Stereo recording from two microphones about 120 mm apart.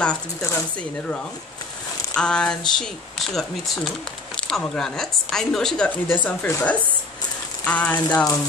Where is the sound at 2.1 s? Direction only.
5° left (ahead or behind).